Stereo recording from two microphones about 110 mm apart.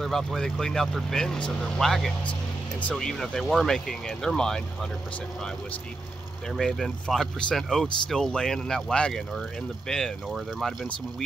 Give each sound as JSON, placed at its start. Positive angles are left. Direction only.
{"t": 0.0, "sound": "speech", "side_deg": 0}
{"t": 6.5, "sound": "speech", "side_deg": 0}